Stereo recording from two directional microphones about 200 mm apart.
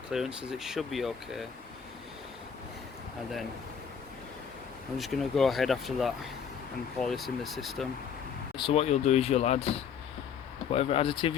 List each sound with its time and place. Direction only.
0.1 s speech: 5° right (ahead or behind)
4.9 s speech: centre (ahead or behind)
8.5 s speech: 25° left (ahead or behind)
10.7 s speech: 30° left (ahead or behind)